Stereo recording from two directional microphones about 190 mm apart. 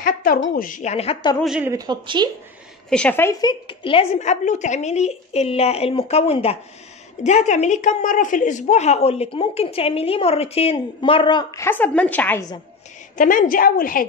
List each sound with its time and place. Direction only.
0.0 s a woman's voice: 50° left (ahead or behind); by 1.3 s 35° left (ahead or behind)
1.4 s speech: 5° right (ahead or behind)
1.7 s speech: 20° right (ahead or behind)
2.9 s a woman's voice: 5° left (ahead or behind); by 11.6 s 25° left (ahead or behind)
11.6 s a woman's voice: 10° left (ahead or behind)
13.2 s a woman's voice: 45° left (ahead or behind)